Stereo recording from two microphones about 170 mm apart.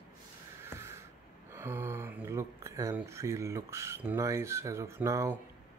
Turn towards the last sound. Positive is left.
turn(degrees=-15)  # may be behind; listen again after turning